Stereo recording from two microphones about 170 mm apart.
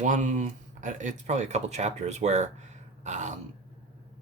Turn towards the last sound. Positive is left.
turn(degrees=-45)  # may be behind; listen again after turning